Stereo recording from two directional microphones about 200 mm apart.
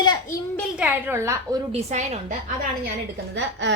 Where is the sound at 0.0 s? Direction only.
20° left (ahead or behind).